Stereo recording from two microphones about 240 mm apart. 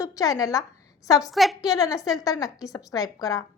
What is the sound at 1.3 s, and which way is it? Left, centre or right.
Speech, centre.